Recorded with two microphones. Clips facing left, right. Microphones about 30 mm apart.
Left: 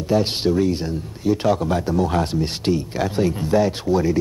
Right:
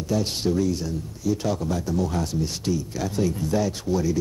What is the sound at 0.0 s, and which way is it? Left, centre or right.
Speech, left.